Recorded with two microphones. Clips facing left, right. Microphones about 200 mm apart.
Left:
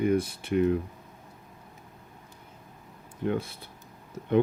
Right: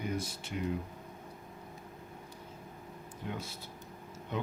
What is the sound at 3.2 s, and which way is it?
Speech, 55° left (ahead or behind).